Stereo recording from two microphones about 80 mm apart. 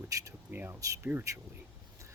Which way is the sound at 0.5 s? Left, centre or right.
Right.